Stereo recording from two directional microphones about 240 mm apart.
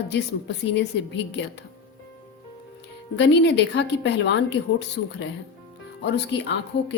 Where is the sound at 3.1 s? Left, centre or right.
Left.